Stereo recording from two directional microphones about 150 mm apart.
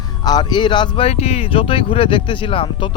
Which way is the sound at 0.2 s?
25° left (ahead or behind).